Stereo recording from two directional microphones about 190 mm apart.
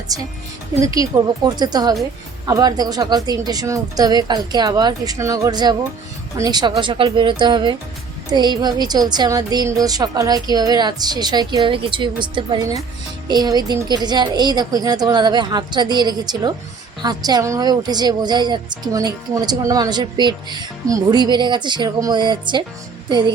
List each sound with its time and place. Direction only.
0.1 s a woman's voice: 20° right (ahead or behind)